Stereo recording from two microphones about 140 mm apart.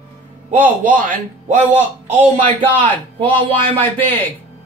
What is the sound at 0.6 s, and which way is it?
Speech, 70° right (ahead or behind).